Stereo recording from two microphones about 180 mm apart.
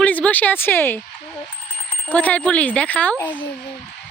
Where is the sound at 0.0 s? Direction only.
10° left (ahead or behind).